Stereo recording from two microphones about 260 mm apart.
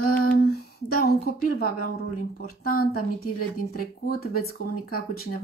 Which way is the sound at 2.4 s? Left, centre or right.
Left.